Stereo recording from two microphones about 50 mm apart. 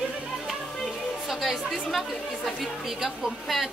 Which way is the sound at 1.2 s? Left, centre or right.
Centre.